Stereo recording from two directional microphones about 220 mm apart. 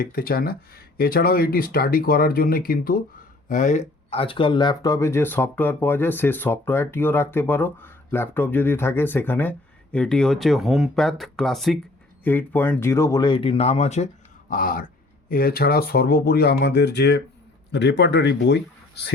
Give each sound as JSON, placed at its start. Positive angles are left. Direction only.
{"t": 0.0, "sound": "a man's voice", "side_deg": 40}